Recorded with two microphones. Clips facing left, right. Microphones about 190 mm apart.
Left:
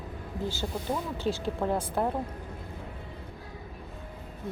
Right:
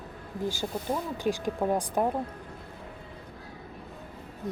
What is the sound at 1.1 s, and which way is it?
Speech, 15° right (ahead or behind).